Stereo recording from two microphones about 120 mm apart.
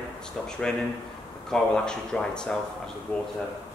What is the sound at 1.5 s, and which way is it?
Speech, 5° left (ahead or behind).